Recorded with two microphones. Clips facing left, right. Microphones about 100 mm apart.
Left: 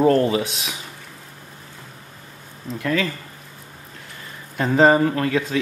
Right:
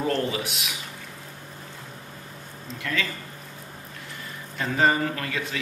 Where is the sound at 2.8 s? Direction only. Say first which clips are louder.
Left 7 dB; 35° left (ahead or behind).